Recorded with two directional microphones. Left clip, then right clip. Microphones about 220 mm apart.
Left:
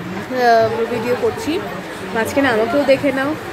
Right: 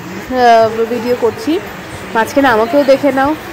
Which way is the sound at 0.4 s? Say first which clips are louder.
Right 5 dB; 15° right (ahead or behind).